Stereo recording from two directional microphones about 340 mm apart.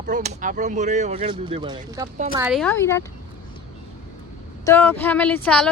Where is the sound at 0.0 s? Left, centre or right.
Right.